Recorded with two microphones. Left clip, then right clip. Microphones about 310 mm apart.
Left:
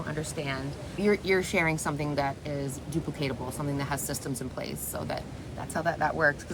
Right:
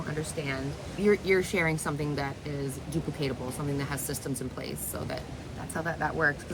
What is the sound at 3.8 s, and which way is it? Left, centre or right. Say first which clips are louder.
Speech: left 2 dB; centre.